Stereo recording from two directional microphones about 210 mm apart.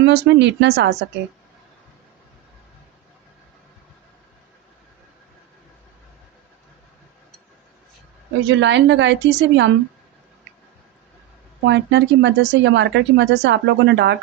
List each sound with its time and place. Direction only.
0.0 s speech: 55° right (ahead or behind)
8.4 s speech: 60° right (ahead or behind)
11.6 s speech: 55° right (ahead or behind)